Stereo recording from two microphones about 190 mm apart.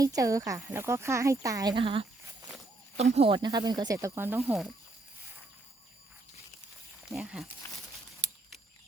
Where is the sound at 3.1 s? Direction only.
30° right (ahead or behind); by 4.7 s 5° right (ahead or behind).